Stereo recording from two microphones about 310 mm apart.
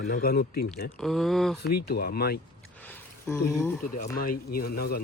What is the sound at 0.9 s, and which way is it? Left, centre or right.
Speech, centre.